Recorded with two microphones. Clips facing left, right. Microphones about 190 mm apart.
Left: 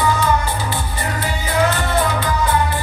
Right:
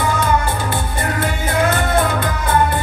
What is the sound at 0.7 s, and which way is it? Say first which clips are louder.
Music: right 3 dB; 55° right (ahead or behind).